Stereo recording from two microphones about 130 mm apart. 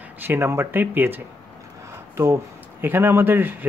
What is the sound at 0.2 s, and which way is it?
Speech, 15° right (ahead or behind).